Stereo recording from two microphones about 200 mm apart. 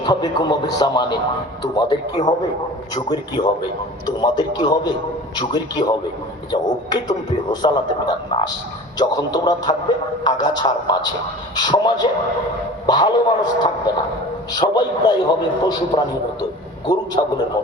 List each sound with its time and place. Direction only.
0.0 s a man's voice: 20° left (ahead or behind)